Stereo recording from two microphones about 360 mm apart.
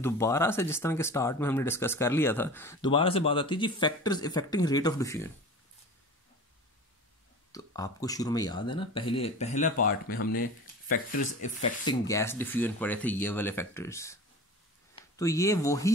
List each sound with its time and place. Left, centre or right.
0.0 s speech: centre
7.5 s speech: centre
11.9 s speech: centre